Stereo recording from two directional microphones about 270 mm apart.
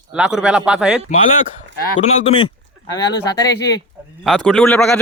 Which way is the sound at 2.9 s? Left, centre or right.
Centre.